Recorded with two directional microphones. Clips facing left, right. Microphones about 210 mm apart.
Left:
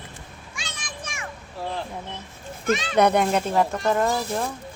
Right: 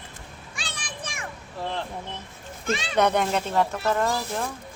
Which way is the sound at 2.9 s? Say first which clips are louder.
Left 2 dB; 10° left (ahead or behind).